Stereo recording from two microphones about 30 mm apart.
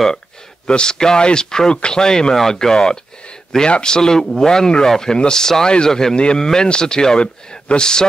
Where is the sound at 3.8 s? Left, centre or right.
Left.